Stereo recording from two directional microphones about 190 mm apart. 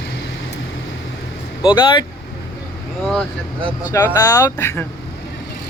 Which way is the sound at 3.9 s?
20° left (ahead or behind).